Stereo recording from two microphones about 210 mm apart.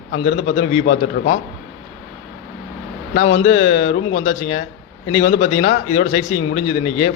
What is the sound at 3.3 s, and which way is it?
A man's voice, 30° left (ahead or behind).